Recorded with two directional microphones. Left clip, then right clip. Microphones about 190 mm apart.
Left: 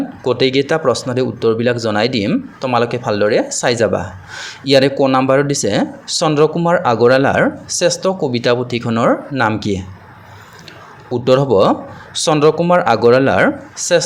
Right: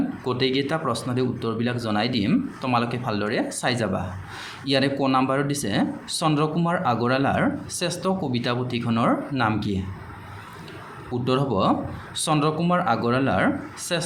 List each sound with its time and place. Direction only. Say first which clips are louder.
0.3 s speech: left 11 dB; 40° left (ahead or behind)
11.1 s speech: left 12 dB; 35° left (ahead or behind)